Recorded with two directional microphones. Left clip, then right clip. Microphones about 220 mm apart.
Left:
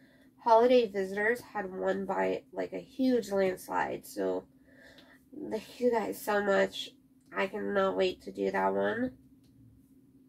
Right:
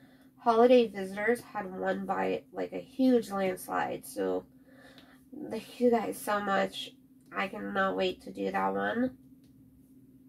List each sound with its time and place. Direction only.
0.4 s a woman's voice: 25° right (ahead or behind)
5.5 s a woman's voice: 25° right (ahead or behind)